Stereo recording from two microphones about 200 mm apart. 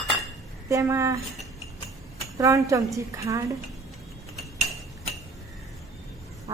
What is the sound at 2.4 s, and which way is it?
A woman's voice, 15° right (ahead or behind).